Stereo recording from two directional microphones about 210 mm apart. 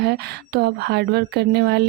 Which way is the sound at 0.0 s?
50° right (ahead or behind).